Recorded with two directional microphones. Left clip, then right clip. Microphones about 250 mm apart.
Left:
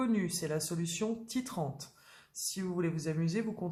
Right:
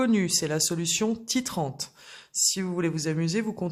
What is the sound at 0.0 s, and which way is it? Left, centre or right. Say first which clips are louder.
Speech: right 9 dB; right.